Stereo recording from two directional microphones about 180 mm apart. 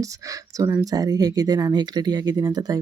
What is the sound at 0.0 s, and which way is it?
Speech, 20° right (ahead or behind).